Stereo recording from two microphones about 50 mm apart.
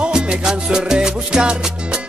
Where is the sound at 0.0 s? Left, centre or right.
Centre.